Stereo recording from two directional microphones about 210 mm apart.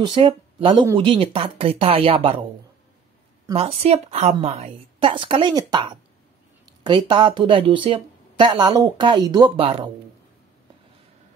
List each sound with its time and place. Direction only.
0.0 s speech: 25° right (ahead or behind)
3.5 s speech: 30° right (ahead or behind)